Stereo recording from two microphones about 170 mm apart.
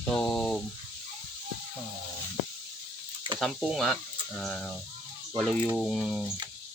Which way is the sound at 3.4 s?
Centre (ahead or behind).